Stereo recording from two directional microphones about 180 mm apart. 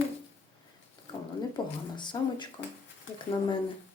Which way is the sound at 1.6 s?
25° left (ahead or behind).